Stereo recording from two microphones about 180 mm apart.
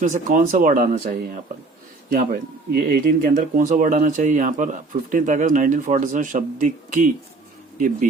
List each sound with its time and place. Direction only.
0.0 s speech: 45° right (ahead or behind)